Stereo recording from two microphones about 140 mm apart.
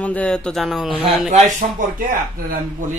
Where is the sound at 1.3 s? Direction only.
65° right (ahead or behind).